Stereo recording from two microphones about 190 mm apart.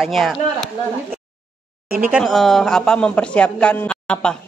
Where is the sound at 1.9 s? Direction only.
5° right (ahead or behind).